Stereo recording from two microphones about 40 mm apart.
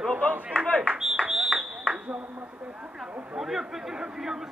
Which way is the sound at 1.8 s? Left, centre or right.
Right.